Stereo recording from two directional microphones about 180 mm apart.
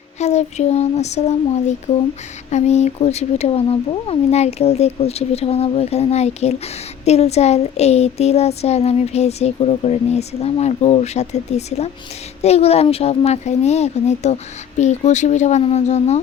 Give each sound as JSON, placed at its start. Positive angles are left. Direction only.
{"t": 0.2, "sound": "child singing", "side_deg": 40}